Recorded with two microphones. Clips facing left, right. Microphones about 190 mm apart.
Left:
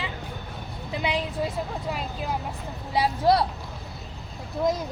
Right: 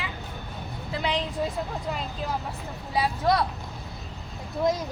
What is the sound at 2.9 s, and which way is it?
Speech, 30° left (ahead or behind).